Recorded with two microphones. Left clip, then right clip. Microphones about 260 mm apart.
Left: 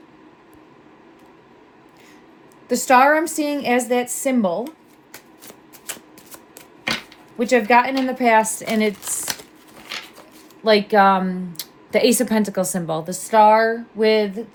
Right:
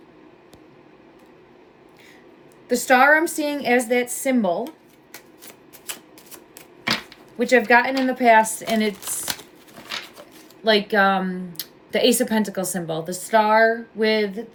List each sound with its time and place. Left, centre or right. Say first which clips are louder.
2.6 s speech: left 1 dB; left
7.3 s speech: left 1 dB; centre
10.6 s speech: left 3 dB; left